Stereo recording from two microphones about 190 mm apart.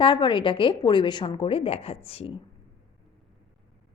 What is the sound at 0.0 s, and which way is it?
A woman's voice, 25° left (ahead or behind).